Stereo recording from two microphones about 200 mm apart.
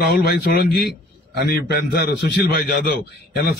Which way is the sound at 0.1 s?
50° left (ahead or behind).